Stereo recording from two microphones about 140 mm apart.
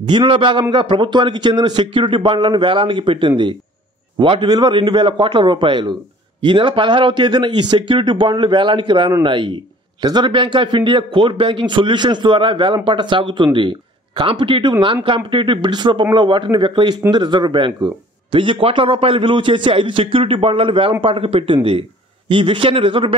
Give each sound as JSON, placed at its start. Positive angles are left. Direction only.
{"t": 0.0, "sound": "a man's voice", "side_deg": -35}